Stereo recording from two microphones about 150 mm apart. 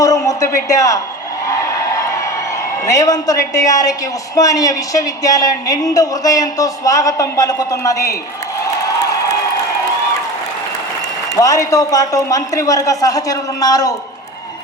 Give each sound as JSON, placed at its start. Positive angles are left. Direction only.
{"t": 0.0, "sound": "a sound", "side_deg": 20}
{"t": 2.8, "sound": "a woman's voice", "side_deg": 20}
{"t": 11.3, "sound": "a woman's voice", "side_deg": 20}